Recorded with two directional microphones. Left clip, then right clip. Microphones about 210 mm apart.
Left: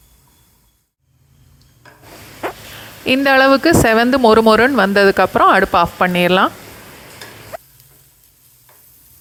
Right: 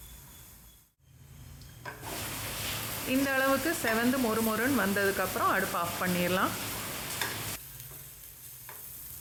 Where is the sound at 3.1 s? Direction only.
40° left (ahead or behind).